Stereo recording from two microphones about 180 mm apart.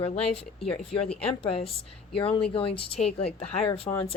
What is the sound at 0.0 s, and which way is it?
A woman's voice, 35° left (ahead or behind).